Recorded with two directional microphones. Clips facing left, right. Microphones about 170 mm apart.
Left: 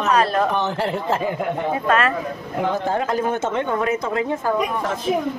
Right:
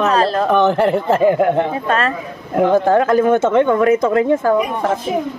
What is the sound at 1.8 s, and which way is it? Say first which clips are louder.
Speech: right 1 dB; 30° right (ahead or behind).